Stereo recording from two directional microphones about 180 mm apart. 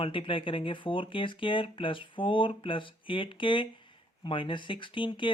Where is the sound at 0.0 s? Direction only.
30° left (ahead or behind).